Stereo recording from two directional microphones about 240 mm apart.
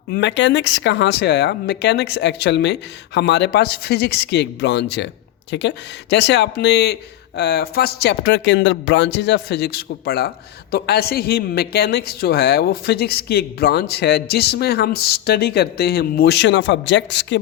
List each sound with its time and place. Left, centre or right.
0.1 s speech: left